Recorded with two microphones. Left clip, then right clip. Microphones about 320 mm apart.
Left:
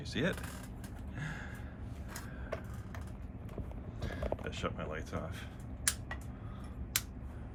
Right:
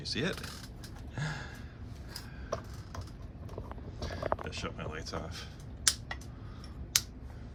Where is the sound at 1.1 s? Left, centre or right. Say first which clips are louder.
Right 4 dB; centre.